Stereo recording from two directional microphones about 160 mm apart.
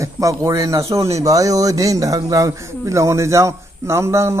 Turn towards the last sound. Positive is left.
turn(degrees=-15)  # may be behind; listen again after turning